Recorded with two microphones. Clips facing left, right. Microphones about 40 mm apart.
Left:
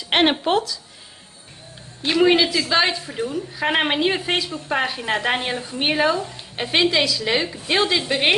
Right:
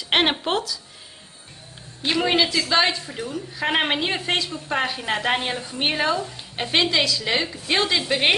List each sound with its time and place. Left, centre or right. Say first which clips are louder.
0.1 s a woman's voice: left 3 dB; centre
2.0 s a woman's voice: left 4 dB; centre